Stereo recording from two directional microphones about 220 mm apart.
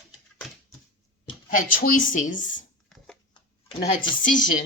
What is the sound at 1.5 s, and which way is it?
Speech, 40° left (ahead or behind).